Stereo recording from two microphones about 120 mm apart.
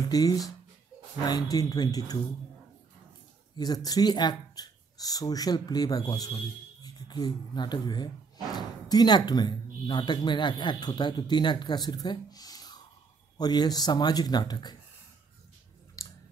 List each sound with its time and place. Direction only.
0.1 s speech: 35° left (ahead or behind)
3.5 s speech: 35° left (ahead or behind)
16.0 s a sound: 30° left (ahead or behind)